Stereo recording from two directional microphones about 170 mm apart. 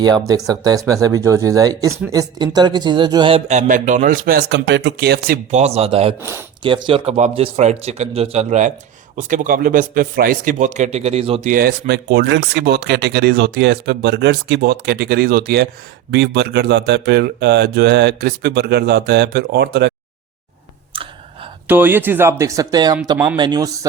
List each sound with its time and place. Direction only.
0.0 s speech: 20° right (ahead or behind); by 5.4 s 65° right (ahead or behind)
5.5 s speech: 40° right (ahead or behind)
11.5 s speech: 65° right (ahead or behind)
16.1 s speech: 75° right (ahead or behind)
21.7 s speech: 10° right (ahead or behind)
23.1 s speech: 10° right (ahead or behind)
23.4 s speech: 25° right (ahead or behind)